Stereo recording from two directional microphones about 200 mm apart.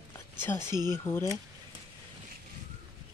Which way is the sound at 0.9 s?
10° left (ahead or behind).